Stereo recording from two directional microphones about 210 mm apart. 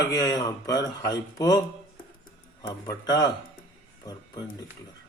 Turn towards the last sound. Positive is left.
turn(degrees=20)  # may be behind; listen again after turning